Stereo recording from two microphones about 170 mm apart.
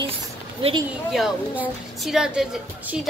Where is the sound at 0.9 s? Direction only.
5° right (ahead or behind).